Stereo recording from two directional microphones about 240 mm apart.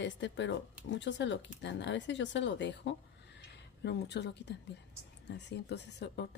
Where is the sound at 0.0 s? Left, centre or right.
Left.